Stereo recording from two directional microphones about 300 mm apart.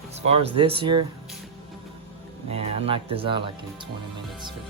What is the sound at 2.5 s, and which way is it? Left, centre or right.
Speech, centre.